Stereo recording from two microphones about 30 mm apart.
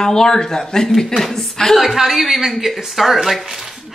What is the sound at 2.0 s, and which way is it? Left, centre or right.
Speech, centre.